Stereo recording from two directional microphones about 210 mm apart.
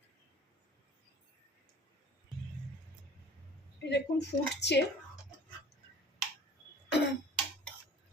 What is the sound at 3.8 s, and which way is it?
Speech, 55° left (ahead or behind).